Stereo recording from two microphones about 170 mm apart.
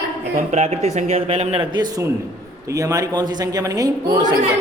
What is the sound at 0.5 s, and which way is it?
Speech, 40° right (ahead or behind).